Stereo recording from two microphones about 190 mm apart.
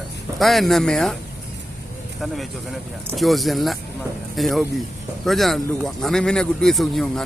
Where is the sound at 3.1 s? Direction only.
Centre (ahead or behind).